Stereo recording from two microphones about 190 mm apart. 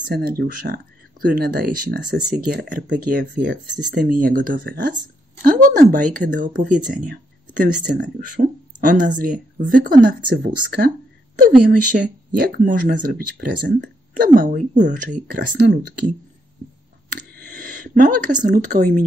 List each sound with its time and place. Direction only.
0.1 s speech: 55° right (ahead or behind)
15.4 s speech: 65° right (ahead or behind)
17.1 s speech: 45° right (ahead or behind)